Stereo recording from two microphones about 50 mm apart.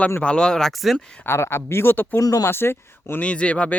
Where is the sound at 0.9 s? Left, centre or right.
Centre.